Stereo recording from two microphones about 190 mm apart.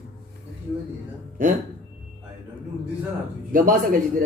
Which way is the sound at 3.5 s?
45° right (ahead or behind).